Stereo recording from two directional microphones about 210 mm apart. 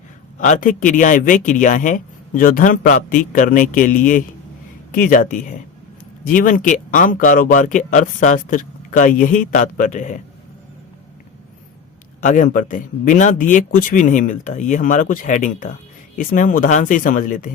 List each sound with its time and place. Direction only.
0.3 s speech: 35° left (ahead or behind)
12.2 s speech: 35° left (ahead or behind)